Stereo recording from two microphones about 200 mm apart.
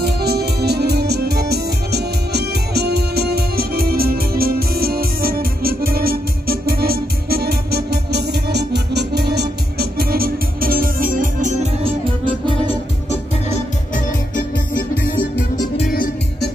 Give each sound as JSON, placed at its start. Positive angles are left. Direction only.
{"t": 0.0, "sound": "music", "side_deg": -50}
{"t": 15.9, "sound": "music", "side_deg": 50}